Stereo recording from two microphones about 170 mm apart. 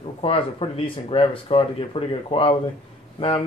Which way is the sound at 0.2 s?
35° left (ahead or behind).